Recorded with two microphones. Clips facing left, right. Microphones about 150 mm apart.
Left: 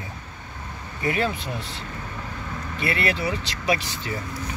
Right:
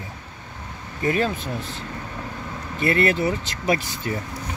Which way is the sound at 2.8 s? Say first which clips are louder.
Right 5 dB; 45° right (ahead or behind).